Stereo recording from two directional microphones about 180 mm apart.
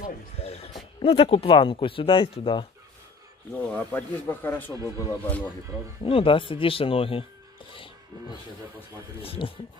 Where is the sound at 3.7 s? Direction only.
10° left (ahead or behind).